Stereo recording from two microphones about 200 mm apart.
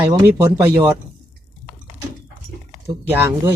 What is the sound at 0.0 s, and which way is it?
Speech, 25° right (ahead or behind).